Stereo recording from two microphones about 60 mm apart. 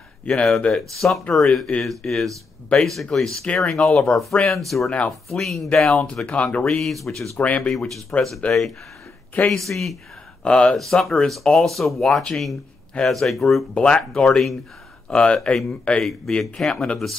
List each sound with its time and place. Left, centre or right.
0.3 s speech: centre
6.2 s speech: left
6.8 s speech: centre
7.3 s speech: left
7.7 s speech: centre
10.4 s speech: centre
10.7 s speech: centre
13.7 s speech: centre
15.0 s speech: centre
16.0 s speech: centre